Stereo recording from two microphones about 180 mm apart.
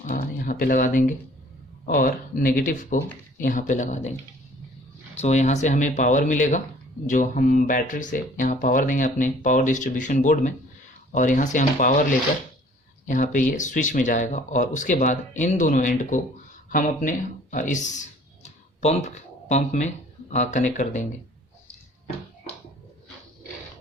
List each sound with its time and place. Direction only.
0.0 s speech: 45° left (ahead or behind)
5.2 s speech: 40° left (ahead or behind)
13.1 s speech: 45° left (ahead or behind)
18.4 s a sound: 35° left (ahead or behind)
20.3 s speech: 40° left (ahead or behind)